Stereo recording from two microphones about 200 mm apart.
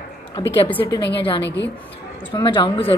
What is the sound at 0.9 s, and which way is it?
Speech, 60° left (ahead or behind).